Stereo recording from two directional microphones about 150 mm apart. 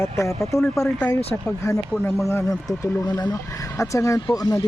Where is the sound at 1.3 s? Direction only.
15° left (ahead or behind).